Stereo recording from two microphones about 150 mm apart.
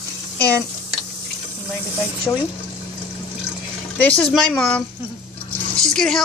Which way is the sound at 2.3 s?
15° left (ahead or behind).